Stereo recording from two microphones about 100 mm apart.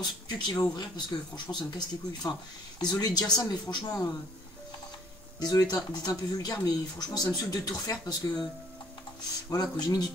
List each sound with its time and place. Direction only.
0.0 s speech: 45° left (ahead or behind)
2.8 s speech: 45° left (ahead or behind)
5.4 s speech: 40° left (ahead or behind)
9.5 s speech: 40° left (ahead or behind)